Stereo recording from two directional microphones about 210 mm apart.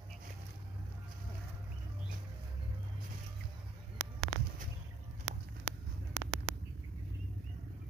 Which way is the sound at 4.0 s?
65° right (ahead or behind).